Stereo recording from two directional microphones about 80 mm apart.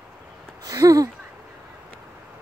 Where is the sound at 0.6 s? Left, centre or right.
Right.